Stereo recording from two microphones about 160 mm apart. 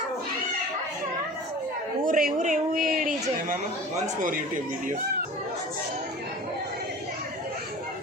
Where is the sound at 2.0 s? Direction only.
60° right (ahead or behind).